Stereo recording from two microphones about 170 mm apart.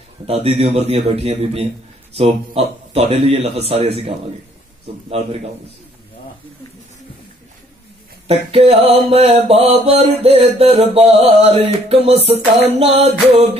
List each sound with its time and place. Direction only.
0.3 s mantra: 35° right (ahead or behind)
8.3 s mantra: 35° right (ahead or behind)